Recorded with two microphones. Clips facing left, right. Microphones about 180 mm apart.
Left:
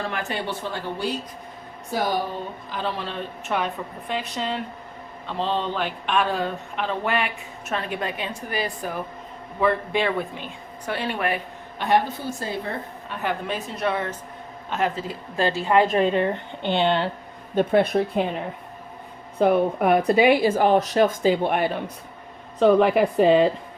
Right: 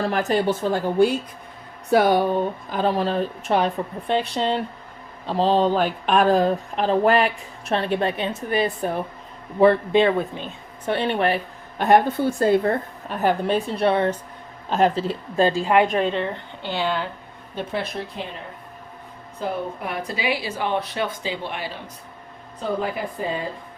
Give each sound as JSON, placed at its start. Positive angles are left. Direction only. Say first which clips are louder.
{"t": 0.0, "sound": "speech", "louder": "right 7 dB", "side_deg": -40}
{"t": 1.9, "sound": "a woman's voice", "louder": "right 8 dB", "side_deg": -65}
{"t": 11.8, "sound": "speech", "louder": "right 5 dB", "side_deg": -50}
{"t": 13.1, "sound": "a woman's voice", "louder": "right 7 dB", "side_deg": -40}
{"t": 16.0, "sound": "a woman's voice", "louder": "left 2 dB", "side_deg": 5}
{"t": 16.2, "sound": "speech", "louder": "left 4 dB", "side_deg": 20}
{"t": 17.5, "sound": "speech", "louder": "left 9 dB", "side_deg": 50}
{"t": 19.4, "sound": "speech", "louder": "left 9 dB", "side_deg": 65}
{"t": 22.6, "sound": "a woman's voice", "louder": "left 9 dB", "side_deg": 75}